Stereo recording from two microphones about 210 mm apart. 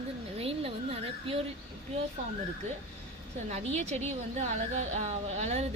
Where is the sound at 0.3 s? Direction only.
25° right (ahead or behind).